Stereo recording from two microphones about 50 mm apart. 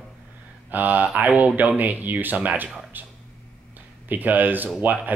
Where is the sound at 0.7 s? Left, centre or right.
Right.